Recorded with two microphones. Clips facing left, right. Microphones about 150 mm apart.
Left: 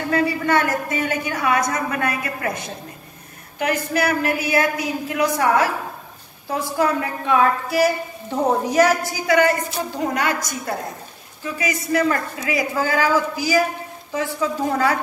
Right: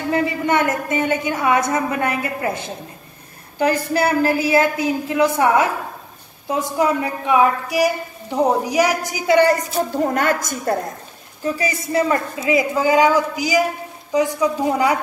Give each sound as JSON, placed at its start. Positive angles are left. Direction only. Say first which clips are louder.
{"t": 0.1, "sound": "a woman's voice", "louder": "even", "side_deg": -20}
{"t": 9.4, "sound": "a woman's voice", "louder": "right 3 dB", "side_deg": -40}
{"t": 11.4, "sound": "a woman's voice", "louder": "right 3 dB", "side_deg": -35}